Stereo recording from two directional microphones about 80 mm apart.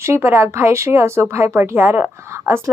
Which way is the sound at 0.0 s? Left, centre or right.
Right.